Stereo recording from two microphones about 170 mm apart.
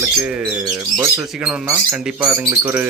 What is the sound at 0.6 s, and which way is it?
Speech, 20° right (ahead or behind).